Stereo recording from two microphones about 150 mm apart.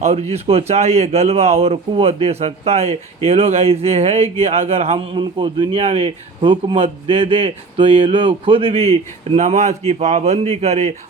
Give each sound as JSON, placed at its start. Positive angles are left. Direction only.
{"t": 0.0, "sound": "speech", "side_deg": -45}